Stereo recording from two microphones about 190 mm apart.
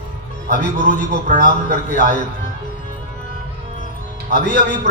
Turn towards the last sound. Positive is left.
turn(degrees=45)  # may be behind; listen again after turning